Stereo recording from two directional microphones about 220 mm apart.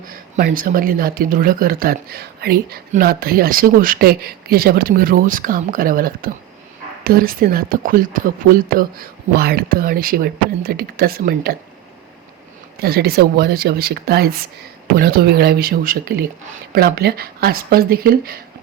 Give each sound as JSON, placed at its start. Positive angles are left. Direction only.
{"t": 0.3, "sound": "speech", "side_deg": -40}
{"t": 12.8, "sound": "speech", "side_deg": -45}